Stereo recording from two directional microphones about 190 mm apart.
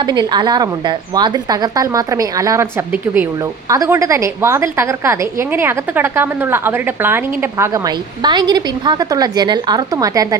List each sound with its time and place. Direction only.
0.0 s a woman's voice: 25° right (ahead or behind)